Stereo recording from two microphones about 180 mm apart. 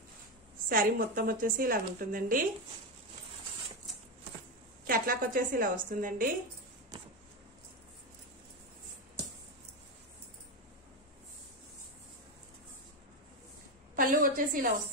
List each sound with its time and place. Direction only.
0.7 s a woman's voice: 50° right (ahead or behind)
4.8 s a woman's voice: 50° right (ahead or behind)
13.9 s a woman's voice: 50° right (ahead or behind)